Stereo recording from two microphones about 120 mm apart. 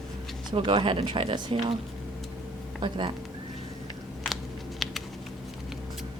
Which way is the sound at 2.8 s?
45° right (ahead or behind).